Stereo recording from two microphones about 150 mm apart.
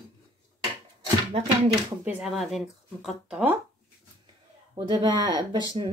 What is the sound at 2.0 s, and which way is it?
Speech, centre (ahead or behind).